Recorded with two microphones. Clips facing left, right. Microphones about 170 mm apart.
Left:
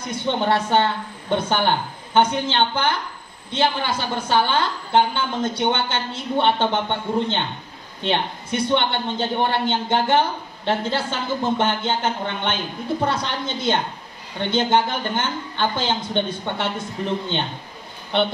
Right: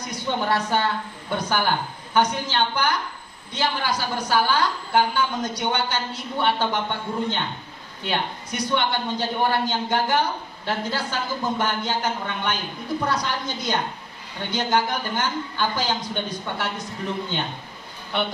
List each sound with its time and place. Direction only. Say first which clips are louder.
0.1 s a man's voice: left 3 dB; 25° left (ahead or behind)